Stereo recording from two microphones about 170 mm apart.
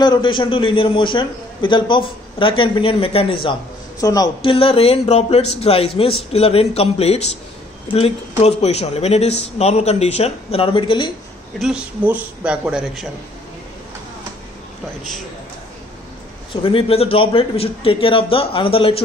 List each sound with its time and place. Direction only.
0.0 s a man's voice: 25° left (ahead or behind)
4.0 s speech: 20° left (ahead or behind)
11.6 s a man's voice: 5° right (ahead or behind)
16.6 s speech: 35° left (ahead or behind)